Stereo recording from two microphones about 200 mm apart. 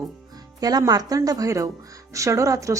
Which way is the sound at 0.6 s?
20° right (ahead or behind).